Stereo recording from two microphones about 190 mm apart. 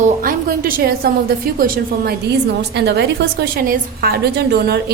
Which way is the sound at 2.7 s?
60° right (ahead or behind).